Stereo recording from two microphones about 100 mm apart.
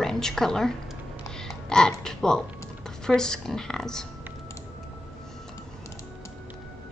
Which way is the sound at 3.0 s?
5° left (ahead or behind).